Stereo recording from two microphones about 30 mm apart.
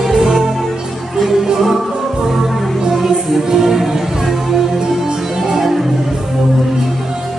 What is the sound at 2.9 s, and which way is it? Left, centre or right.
Music, centre.